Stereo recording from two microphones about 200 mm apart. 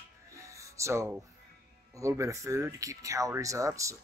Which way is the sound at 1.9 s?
15° right (ahead or behind).